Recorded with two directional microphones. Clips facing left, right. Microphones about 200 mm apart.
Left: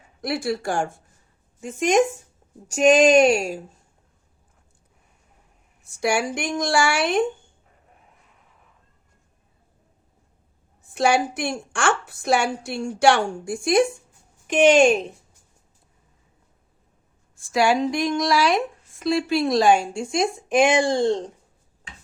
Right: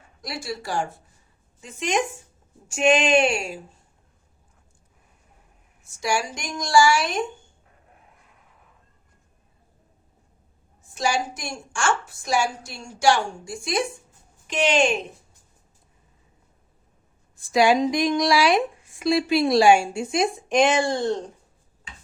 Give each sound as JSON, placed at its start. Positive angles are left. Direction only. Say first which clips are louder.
{"t": 0.2, "sound": "a woman's voice", "louder": "left 7 dB", "side_deg": 60}
{"t": 5.8, "sound": "a woman's voice", "louder": "left 3 dB", "side_deg": 60}
{"t": 10.8, "sound": "a woman's voice", "louder": "left 5 dB", "side_deg": 60}
{"t": 17.3, "sound": "speech", "louder": "right 1 dB", "side_deg": -15}
{"t": 20.9, "sound": "speech", "louder": "left 4 dB", "side_deg": 25}